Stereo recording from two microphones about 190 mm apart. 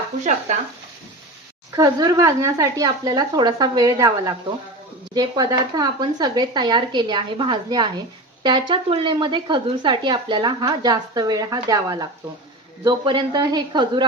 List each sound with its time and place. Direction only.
1.7 s speech: 20° right (ahead or behind)